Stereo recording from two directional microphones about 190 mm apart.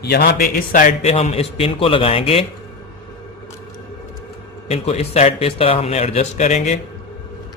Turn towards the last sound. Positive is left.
turn(degrees=40)  # may be behind; listen again after turning